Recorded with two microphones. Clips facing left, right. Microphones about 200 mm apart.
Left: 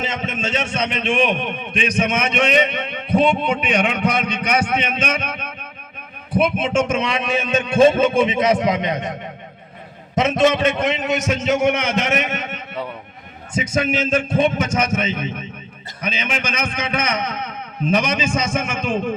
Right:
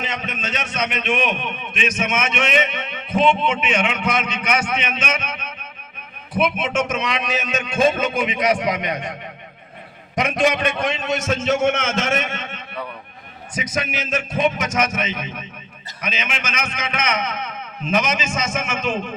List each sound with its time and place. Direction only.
0.0 s a man's voice: 25° left (ahead or behind)
5.2 s speech: 55° left (ahead or behind)
6.3 s a man's voice: 30° left (ahead or behind)
10.2 s a man's voice: 25° left (ahead or behind)